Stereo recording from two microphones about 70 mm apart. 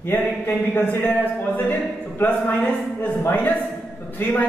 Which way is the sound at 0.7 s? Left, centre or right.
Left.